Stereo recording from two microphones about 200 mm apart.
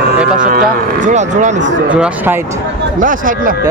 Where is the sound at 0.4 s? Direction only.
45° right (ahead or behind).